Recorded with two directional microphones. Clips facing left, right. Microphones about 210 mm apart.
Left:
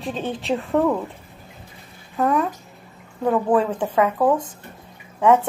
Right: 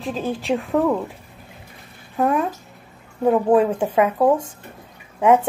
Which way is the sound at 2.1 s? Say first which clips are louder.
Right 1 dB; 15° right (ahead or behind).